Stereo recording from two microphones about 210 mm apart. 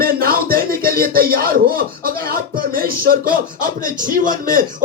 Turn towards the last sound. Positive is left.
turn(degrees=-40)  # may be behind; listen again after turning